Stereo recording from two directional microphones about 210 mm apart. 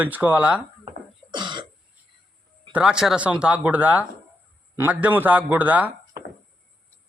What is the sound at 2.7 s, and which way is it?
A man's voice, 5° right (ahead or behind).